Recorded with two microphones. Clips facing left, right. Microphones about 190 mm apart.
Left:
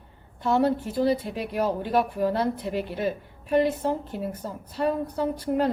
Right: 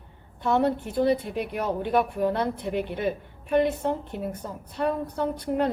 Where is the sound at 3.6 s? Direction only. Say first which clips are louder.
Even; 5° left (ahead or behind).